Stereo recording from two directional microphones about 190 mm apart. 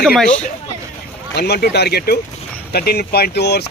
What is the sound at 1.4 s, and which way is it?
Speech, 60° left (ahead or behind).